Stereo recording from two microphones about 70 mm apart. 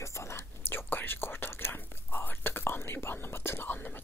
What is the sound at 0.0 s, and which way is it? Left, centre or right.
Whispering, left.